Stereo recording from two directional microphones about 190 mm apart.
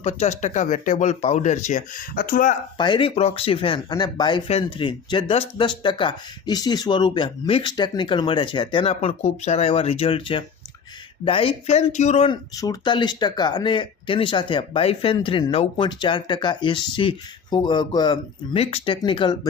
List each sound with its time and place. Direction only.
0.0 s speech: 35° left (ahead or behind)
2.7 s speech: 25° left (ahead or behind)